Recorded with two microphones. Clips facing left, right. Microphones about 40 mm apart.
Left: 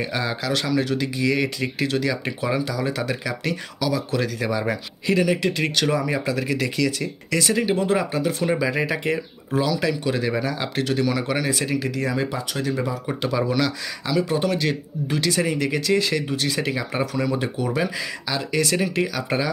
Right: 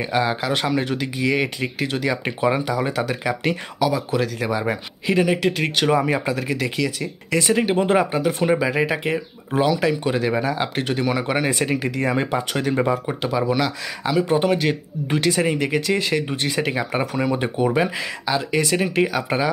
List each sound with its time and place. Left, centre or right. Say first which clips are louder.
0.0 s speech: right 4 dB; centre
5.9 s speech: right 3 dB; right
6.3 s speech: even; centre; by 8.2 s right
8.5 s speech: right 3 dB; centre
9.5 s speech: right 3 dB; right
10.1 s speech: right 3 dB; centre
12.1 s speech: right 4 dB; right
13.0 s speech: right 1 dB; centre
19.2 s speech: right 2 dB; centre